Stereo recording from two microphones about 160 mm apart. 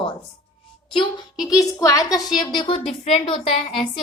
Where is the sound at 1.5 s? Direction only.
20° left (ahead or behind).